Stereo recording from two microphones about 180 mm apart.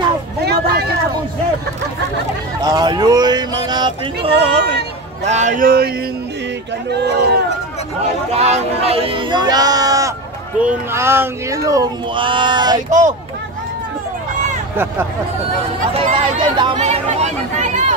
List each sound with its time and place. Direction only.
2.6 s speech: 20° right (ahead or behind)
5.2 s speech: 40° right (ahead or behind)
6.9 s speech: 65° right (ahead or behind)
8.3 s speech: 35° right (ahead or behind)
15.9 s speech: 30° right (ahead or behind)